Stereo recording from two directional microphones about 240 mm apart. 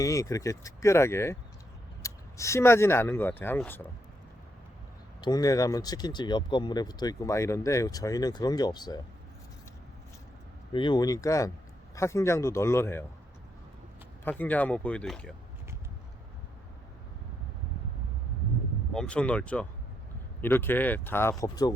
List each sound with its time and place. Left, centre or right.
0.0 s speech: centre
5.2 s speech: centre
10.7 s speech: centre
14.3 s speech: centre
18.9 s speech: centre